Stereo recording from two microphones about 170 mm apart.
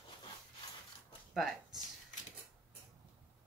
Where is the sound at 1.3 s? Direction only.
Centre (ahead or behind).